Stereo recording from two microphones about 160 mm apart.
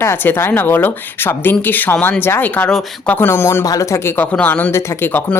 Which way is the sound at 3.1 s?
15° left (ahead or behind).